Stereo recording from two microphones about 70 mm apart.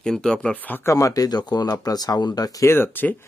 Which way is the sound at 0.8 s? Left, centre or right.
Left.